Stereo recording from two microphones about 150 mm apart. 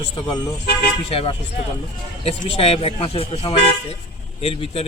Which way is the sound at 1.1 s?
40° left (ahead or behind).